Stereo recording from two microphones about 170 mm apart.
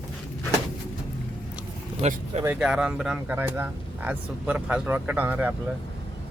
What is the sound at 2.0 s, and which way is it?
Speech, 40° right (ahead or behind).